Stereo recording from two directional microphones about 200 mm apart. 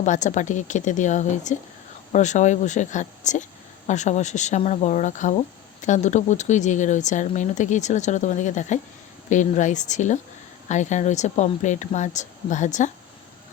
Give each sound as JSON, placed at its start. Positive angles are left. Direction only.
{"t": 0.0, "sound": "speech", "side_deg": 40}